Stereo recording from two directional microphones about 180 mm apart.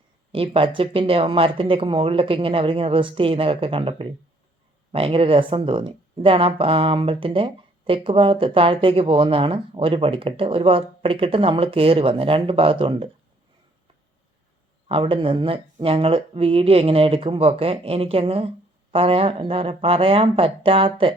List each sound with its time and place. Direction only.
0.3 s speech: 30° right (ahead or behind)
14.8 s speech: 30° right (ahead or behind)